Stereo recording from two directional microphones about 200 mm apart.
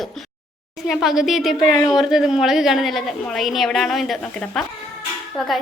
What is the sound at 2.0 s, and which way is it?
A woman's voice, centre (ahead or behind).